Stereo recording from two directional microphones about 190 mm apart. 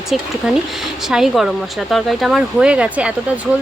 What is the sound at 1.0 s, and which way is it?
Speech, centre (ahead or behind).